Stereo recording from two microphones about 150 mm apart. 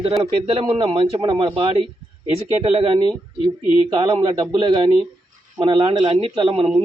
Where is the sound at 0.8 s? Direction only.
35° right (ahead or behind).